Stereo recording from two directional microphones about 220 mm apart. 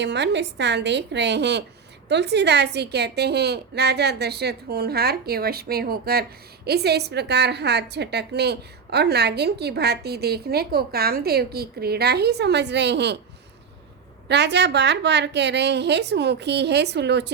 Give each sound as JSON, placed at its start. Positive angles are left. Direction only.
{"t": 0.0, "sound": "a woman's voice", "side_deg": -50}
{"t": 14.3, "sound": "a woman's voice", "side_deg": -50}